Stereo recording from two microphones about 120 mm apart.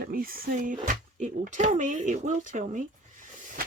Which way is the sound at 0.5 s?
90° right.